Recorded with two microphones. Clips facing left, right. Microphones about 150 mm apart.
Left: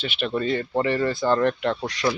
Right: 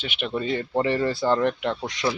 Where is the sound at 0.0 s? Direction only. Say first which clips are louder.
Left 2 dB; 15° right (ahead or behind).